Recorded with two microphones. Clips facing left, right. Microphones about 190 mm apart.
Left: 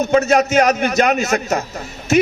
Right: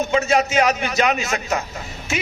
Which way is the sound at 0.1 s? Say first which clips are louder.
Left 6 dB; 45° left (ahead or behind).